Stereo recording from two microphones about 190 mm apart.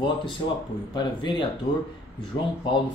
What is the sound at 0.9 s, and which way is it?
Speech, 25° left (ahead or behind).